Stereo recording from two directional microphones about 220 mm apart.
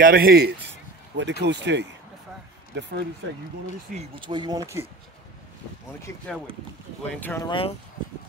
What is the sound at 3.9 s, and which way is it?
Speech, 25° right (ahead or behind).